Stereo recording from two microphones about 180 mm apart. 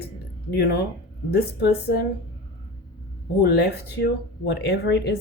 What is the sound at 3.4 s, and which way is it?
Speech, 60° left (ahead or behind).